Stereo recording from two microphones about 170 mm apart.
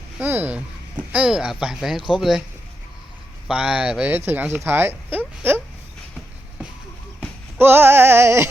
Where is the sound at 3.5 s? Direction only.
5° right (ahead or behind).